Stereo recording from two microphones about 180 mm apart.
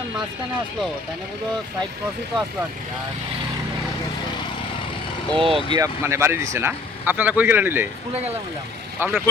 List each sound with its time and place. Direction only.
5.3 s speech: 30° right (ahead or behind)
5.7 s a man's voice: 15° right (ahead or behind)
9.0 s speech: 10° right (ahead or behind)